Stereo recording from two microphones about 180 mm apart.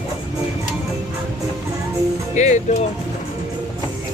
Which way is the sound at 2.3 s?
40° left (ahead or behind).